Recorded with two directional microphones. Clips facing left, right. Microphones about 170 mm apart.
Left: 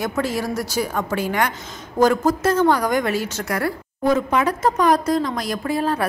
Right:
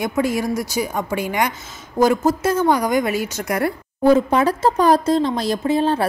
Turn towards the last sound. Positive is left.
turn(degrees=-25)  # may be behind; listen again after turning